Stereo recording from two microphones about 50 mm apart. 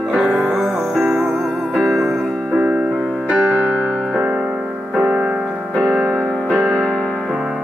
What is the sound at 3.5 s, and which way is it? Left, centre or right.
Music, right.